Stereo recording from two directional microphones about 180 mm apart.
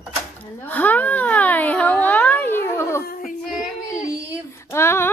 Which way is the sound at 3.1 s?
50° left (ahead or behind).